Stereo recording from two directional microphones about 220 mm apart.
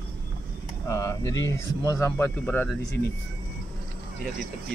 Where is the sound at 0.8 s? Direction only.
15° left (ahead or behind).